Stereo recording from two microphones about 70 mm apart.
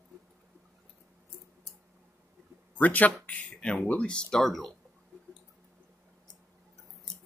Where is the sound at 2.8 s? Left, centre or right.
Left; by 4.7 s centre.